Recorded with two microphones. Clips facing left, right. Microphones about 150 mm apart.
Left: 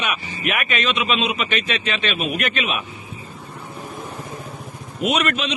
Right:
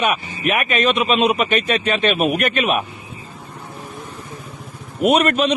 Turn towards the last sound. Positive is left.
turn(degrees=-50)  # may be behind; listen again after turning